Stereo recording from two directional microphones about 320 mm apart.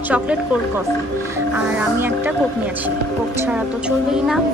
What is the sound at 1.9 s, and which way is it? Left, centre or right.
Speech, centre.